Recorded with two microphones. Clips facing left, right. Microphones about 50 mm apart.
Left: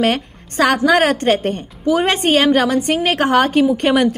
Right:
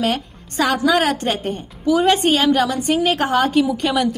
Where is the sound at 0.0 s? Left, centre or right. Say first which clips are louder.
Left 4 dB; left.